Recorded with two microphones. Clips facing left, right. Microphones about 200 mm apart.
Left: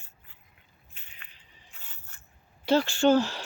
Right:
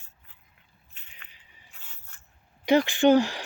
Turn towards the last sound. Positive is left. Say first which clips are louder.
# right 3 dB
turn(degrees=-15)  # may be behind; listen again after turning